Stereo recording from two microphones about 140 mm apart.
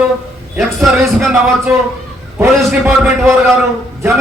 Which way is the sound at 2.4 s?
15° right (ahead or behind).